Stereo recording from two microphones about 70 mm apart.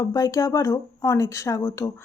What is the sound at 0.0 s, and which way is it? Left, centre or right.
Speech, left.